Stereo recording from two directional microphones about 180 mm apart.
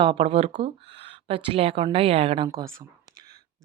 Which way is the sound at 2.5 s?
15° right (ahead or behind).